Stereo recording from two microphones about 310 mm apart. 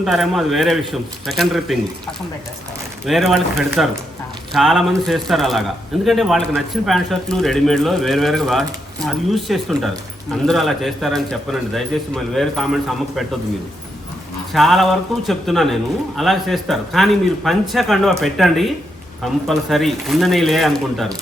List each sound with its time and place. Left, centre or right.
0.0 s a man's voice: centre
3.1 s a man's voice: centre
14.5 s a man's voice: centre